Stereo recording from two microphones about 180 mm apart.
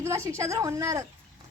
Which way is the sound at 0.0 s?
15° right (ahead or behind).